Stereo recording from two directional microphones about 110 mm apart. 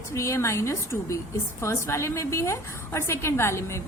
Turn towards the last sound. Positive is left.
turn(degrees=25)  # may be behind; listen again after turning